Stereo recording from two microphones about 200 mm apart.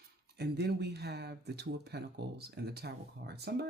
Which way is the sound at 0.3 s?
55° right (ahead or behind).